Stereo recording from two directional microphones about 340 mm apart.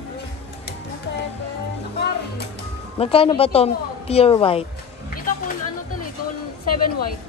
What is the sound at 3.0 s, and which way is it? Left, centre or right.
A woman's voice, centre.